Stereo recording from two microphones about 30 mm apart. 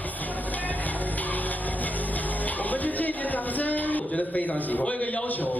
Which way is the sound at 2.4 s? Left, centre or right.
Left.